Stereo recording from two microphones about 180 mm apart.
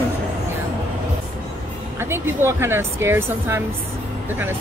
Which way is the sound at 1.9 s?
15° right (ahead or behind).